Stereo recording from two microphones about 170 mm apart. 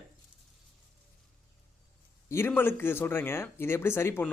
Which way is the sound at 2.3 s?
15° left (ahead or behind).